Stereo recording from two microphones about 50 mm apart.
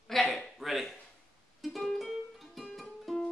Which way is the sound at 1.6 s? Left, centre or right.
Centre.